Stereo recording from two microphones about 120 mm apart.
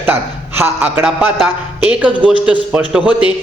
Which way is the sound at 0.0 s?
15° right (ahead or behind).